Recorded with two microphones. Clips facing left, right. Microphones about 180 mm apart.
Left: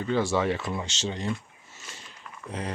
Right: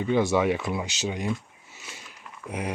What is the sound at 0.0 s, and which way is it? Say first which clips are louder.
Speech: right 3 dB; 15° right (ahead or behind).